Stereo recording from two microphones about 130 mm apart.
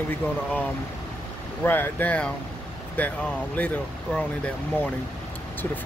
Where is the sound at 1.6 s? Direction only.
15° left (ahead or behind).